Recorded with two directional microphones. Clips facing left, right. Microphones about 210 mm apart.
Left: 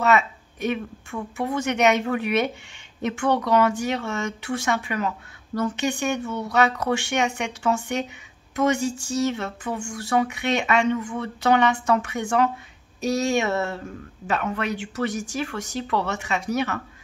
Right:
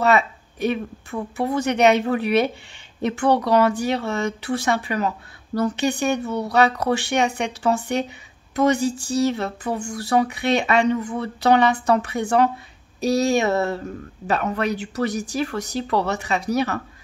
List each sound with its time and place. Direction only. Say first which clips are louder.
0.0 s speech: right 2 dB; 35° right (ahead or behind)